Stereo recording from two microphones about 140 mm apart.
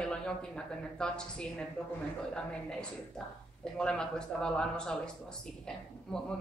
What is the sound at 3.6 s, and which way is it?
Speech, 5° left (ahead or behind).